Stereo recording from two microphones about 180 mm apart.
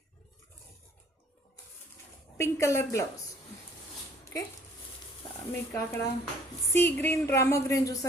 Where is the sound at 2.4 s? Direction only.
15° left (ahead or behind).